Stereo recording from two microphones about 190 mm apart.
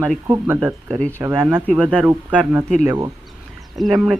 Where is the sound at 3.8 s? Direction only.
Centre (ahead or behind).